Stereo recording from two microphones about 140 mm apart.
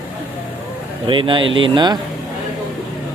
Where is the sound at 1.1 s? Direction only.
35° right (ahead or behind).